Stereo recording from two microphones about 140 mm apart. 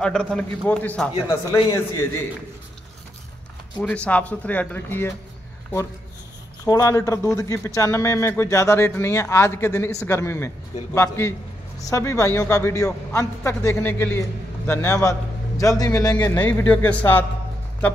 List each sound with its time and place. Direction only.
0.0 s speech: 5° left (ahead or behind)
1.5 s a man's voice: 20° left (ahead or behind)
3.8 s speech: 10° left (ahead or behind)
6.6 s a man's voice: 25° left (ahead or behind)
16.3 s speech: 10° left (ahead or behind)